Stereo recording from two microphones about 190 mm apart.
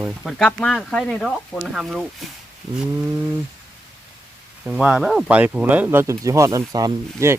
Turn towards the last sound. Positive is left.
turn(degrees=-15)  # may be behind; listen again after turning